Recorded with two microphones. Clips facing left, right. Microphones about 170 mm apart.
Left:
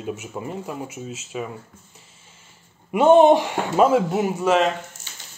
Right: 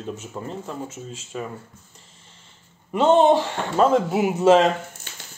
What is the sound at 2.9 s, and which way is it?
Speech, 10° left (ahead or behind).